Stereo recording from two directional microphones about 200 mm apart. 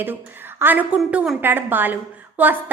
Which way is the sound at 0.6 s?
10° right (ahead or behind).